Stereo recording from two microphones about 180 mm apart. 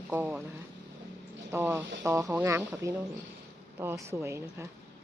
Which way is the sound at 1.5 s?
15° right (ahead or behind).